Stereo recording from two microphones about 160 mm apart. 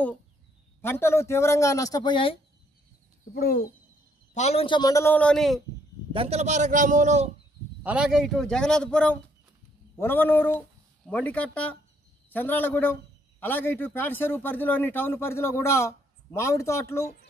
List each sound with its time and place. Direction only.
0.8 s speech: 15° left (ahead or behind)
3.3 s speech: 65° left (ahead or behind)
4.3 s speech: 45° left (ahead or behind); by 5.6 s 5° left (ahead or behind)
6.1 s a man's voice: 40° right (ahead or behind)
7.8 s a man's voice: 5° right (ahead or behind); by 16.8 s 20° left (ahead or behind)